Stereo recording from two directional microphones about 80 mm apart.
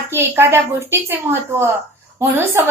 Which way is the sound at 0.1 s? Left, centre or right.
Right.